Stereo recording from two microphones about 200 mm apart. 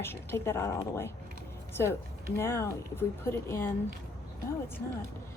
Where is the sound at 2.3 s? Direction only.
15° left (ahead or behind).